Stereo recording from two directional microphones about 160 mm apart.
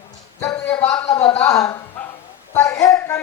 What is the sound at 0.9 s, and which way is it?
A woman's voice, 25° left (ahead or behind).